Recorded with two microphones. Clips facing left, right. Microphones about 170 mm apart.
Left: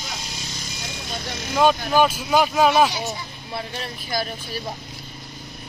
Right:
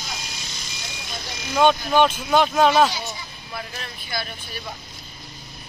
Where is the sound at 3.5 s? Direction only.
30° left (ahead or behind).